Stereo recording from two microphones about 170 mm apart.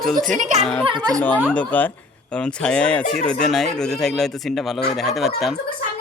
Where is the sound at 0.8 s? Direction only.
25° right (ahead or behind).